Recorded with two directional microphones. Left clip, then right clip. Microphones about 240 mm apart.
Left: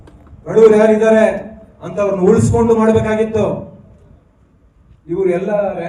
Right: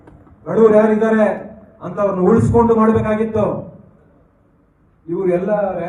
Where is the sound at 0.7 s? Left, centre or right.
Left.